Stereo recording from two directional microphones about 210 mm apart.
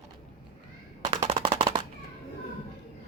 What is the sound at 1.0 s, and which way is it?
Machine gun, 25° right (ahead or behind).